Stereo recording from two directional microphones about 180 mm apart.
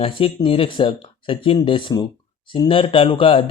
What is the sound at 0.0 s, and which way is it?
Speech, 30° left (ahead or behind).